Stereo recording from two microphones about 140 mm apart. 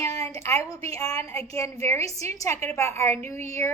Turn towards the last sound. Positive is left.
turn(degrees=20)  # may be behind; listen again after turning